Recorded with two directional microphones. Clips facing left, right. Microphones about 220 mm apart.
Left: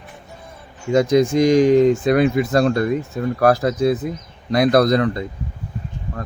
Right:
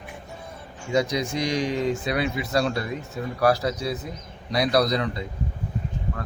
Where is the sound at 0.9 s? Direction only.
50° left (ahead or behind).